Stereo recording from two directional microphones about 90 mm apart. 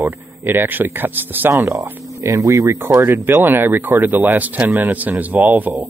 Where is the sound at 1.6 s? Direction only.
35° right (ahead or behind).